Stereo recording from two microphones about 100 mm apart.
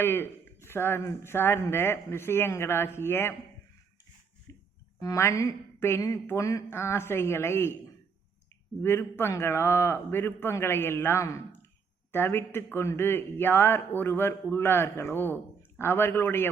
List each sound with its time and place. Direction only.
0.0 s speech: 20° left (ahead or behind)
4.5 s a sound: 35° left (ahead or behind)
4.9 s speech: 35° left (ahead or behind)
8.8 s speech: 25° left (ahead or behind)